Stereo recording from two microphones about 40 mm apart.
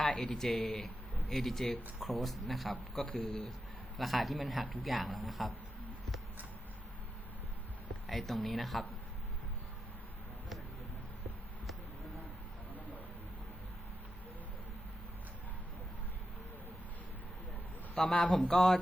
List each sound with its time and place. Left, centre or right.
0.0 s speech: centre
3.2 s speech: left
3.9 s speech: centre
8.0 s speech: centre
18.1 s speech: left
18.4 s speech: centre